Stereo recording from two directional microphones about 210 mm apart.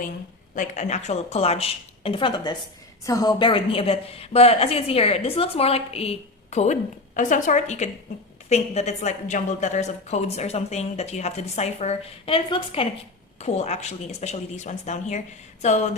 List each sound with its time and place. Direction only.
0.5 s a woman's voice: 35° left (ahead or behind)